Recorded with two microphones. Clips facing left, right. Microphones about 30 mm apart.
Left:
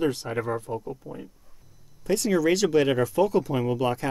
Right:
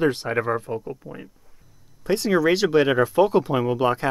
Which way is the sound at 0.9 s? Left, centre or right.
Right.